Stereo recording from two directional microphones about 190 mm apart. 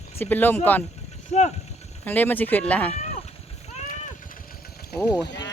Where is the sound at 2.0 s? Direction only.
10° left (ahead or behind).